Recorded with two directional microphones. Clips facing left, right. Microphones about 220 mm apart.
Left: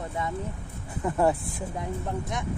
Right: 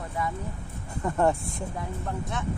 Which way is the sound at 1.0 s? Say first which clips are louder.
Even; 5° left (ahead or behind).